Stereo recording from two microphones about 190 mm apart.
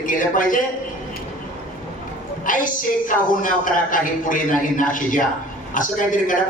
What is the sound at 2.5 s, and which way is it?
A man's voice, 45° left (ahead or behind).